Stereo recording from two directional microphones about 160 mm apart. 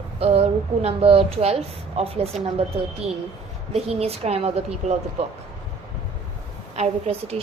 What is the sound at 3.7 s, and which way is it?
A woman's voice, 40° right (ahead or behind).